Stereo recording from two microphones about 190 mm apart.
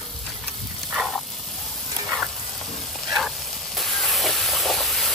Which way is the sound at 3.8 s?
Centre (ahead or behind).